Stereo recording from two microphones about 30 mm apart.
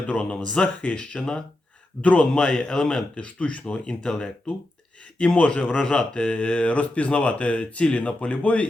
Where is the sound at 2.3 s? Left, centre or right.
Left.